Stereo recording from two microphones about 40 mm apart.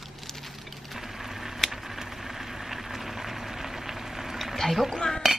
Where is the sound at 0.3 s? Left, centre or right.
Centre.